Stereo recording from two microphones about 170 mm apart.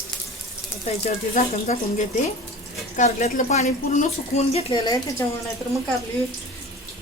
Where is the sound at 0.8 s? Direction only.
45° left (ahead or behind).